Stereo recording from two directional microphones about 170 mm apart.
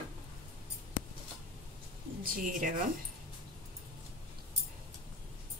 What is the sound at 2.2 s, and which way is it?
Speech, 55° right (ahead or behind).